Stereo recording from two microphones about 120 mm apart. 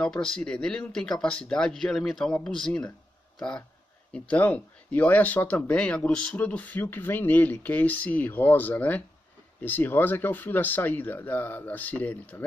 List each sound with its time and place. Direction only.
0.0 s speech: 5° left (ahead or behind)